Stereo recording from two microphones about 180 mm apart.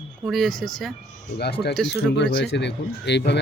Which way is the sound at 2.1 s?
75° left (ahead or behind).